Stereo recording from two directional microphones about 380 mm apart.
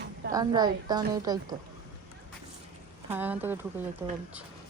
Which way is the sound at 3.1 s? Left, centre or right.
Centre.